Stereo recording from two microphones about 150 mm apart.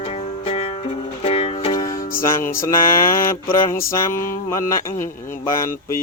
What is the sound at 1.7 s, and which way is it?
Music, 20° left (ahead or behind).